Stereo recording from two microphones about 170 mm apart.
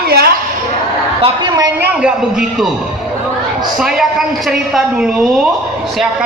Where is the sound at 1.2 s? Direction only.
25° right (ahead or behind).